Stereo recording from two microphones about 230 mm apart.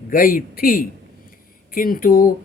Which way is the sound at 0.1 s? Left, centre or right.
Left.